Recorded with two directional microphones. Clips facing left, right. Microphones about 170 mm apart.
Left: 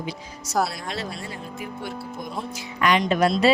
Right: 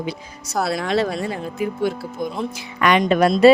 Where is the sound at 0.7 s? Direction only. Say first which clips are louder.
Right 11 dB; 90° right.